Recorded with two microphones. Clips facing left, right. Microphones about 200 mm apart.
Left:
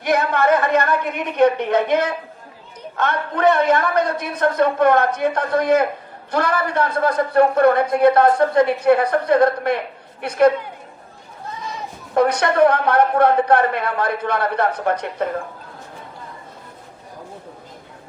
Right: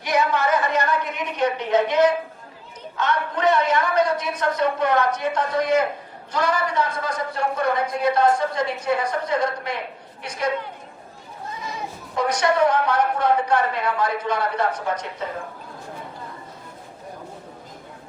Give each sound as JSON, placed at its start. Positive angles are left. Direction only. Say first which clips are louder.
{"t": 0.0, "sound": "a man's voice", "louder": "left 3 dB", "side_deg": 55}
{"t": 12.1, "sound": "a man's voice", "louder": "left 5 dB", "side_deg": 60}